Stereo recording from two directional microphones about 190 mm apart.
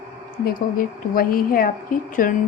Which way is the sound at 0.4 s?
50° left (ahead or behind).